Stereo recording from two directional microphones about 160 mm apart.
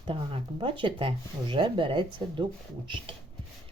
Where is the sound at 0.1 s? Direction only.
35° right (ahead or behind).